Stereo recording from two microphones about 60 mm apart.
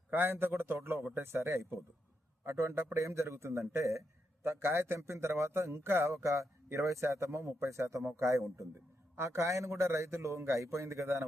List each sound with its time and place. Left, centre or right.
0.1 s a man's voice: right
2.4 s a man's voice: right
3.0 s a man's voice: right
9.1 s a man's voice: right